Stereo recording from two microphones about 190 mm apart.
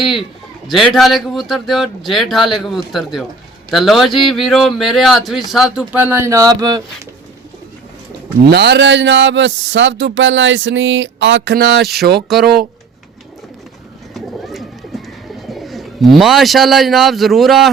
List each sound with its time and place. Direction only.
0.0 s a man's voice: centre (ahead or behind); by 6.8 s 20° right (ahead or behind)
8.4 s speech: 60° right (ahead or behind)
14.1 s bird: centre (ahead or behind)
15.6 s a man's voice: centre (ahead or behind)